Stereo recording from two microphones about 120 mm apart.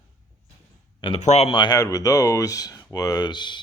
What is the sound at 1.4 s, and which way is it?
Speech, 45° left (ahead or behind).